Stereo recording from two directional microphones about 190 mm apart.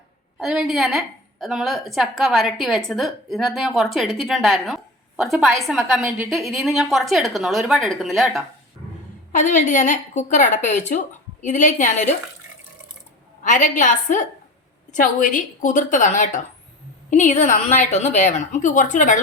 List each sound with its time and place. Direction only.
0.3 s a woman's voice: 5° right (ahead or behind)
9.3 s a woman's voice: 40° left (ahead or behind)
13.4 s a woman's voice: 40° left (ahead or behind)